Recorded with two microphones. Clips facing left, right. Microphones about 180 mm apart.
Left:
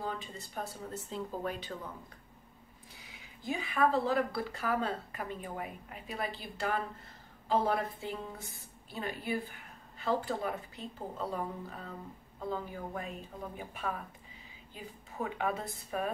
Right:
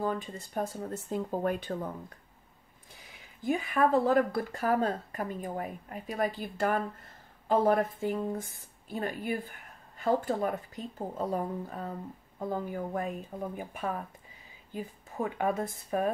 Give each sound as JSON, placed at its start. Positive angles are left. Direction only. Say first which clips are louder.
{"t": 0.0, "sound": "speech", "louder": "right 7 dB", "side_deg": -45}
{"t": 3.4, "sound": "speech", "louder": "right 4 dB", "side_deg": -45}
{"t": 14.7, "sound": "speech", "louder": "right 8 dB", "side_deg": -45}